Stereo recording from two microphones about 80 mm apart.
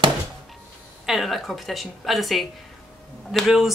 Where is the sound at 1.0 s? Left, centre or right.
Centre.